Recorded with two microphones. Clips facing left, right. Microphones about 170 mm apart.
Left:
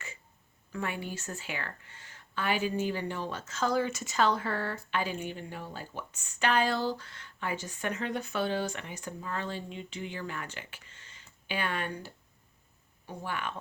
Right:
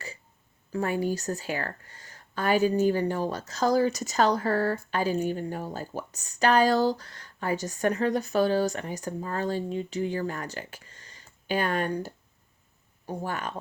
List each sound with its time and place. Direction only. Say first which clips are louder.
0.7 s speech: right 9 dB; 40° right (ahead or behind)